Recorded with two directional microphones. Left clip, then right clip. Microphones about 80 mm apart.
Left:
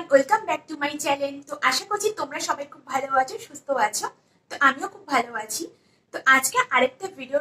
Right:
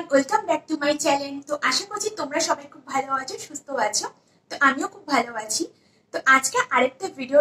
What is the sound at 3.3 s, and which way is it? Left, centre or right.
Speech, left.